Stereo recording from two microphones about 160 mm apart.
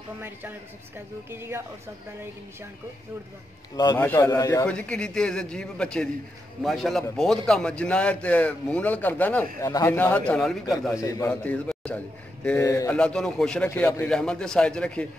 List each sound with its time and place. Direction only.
0.2 s a man's voice: 15° right (ahead or behind)
3.7 s a man's voice: 25° left (ahead or behind)
4.6 s a man's voice: 5° left (ahead or behind)
10.9 s a man's voice: 20° left (ahead or behind)
11.2 s a man's voice: 10° left (ahead or behind)
12.4 s a man's voice: 20° left (ahead or behind)
12.9 s a man's voice: 5° left (ahead or behind)
13.7 s a man's voice: 15° left (ahead or behind)
14.0 s a man's voice: 5° left (ahead or behind)